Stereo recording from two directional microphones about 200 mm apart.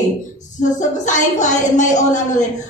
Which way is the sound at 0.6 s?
40° left (ahead or behind).